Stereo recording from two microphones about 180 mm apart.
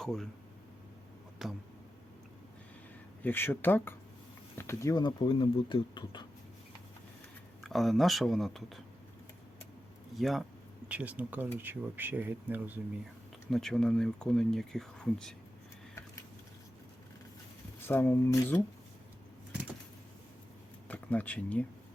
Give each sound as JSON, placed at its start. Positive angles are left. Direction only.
{"t": 0.0, "sound": "speech", "side_deg": 0}
{"t": 1.4, "sound": "speech", "side_deg": 0}
{"t": 3.2, "sound": "speech", "side_deg": 10}
{"t": 7.6, "sound": "speech", "side_deg": 0}
{"t": 10.2, "sound": "speech", "side_deg": 0}
{"t": 13.5, "sound": "speech", "side_deg": 0}
{"t": 17.8, "sound": "speech", "side_deg": 10}
{"t": 20.8, "sound": "speech", "side_deg": 10}